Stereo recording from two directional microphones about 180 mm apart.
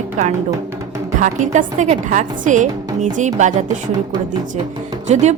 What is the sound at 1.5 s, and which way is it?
A woman's voice, 40° right (ahead or behind).